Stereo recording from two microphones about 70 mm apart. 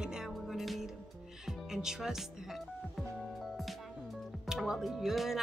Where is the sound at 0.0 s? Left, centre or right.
Centre.